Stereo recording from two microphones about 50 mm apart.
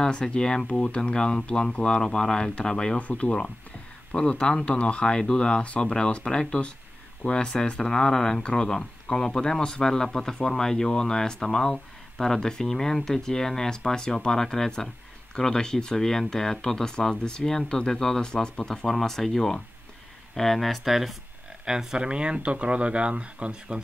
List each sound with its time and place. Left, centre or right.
0.0 s speech: centre
3.0 s speech: left
18.9 s speech: centre
21.6 s speech: centre